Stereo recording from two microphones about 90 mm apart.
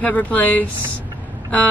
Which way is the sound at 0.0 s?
20° left (ahead or behind).